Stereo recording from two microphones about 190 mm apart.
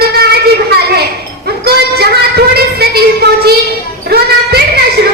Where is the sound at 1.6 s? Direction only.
55° right (ahead or behind).